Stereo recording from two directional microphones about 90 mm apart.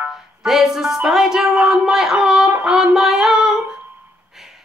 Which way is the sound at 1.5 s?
10° right (ahead or behind).